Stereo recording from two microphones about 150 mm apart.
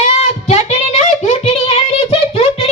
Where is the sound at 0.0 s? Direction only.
50° left (ahead or behind).